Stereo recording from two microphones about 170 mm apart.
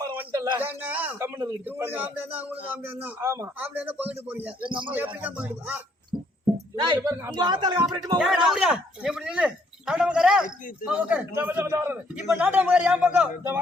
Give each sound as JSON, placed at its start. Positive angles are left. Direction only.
{"t": 0.0, "sound": "a man's voice", "side_deg": -15}
{"t": 4.6, "sound": "speech", "side_deg": -30}
{"t": 4.9, "sound": "a man's voice", "side_deg": -10}
{"t": 6.7, "sound": "speech", "side_deg": -25}
{"t": 8.2, "sound": "speech", "side_deg": -5}